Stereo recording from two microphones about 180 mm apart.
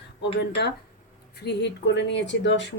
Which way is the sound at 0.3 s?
65° left (ahead or behind).